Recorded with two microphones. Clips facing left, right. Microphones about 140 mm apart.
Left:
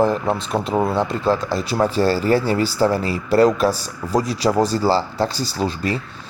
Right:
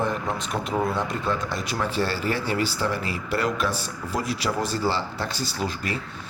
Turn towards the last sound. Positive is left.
turn(degrees=30)  # may be behind; listen again after turning